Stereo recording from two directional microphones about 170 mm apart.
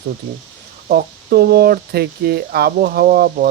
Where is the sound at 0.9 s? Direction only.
65° right (ahead or behind).